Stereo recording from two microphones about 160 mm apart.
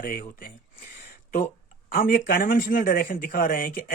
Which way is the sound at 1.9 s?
60° left (ahead or behind).